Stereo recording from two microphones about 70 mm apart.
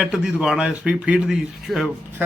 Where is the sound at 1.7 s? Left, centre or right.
Centre.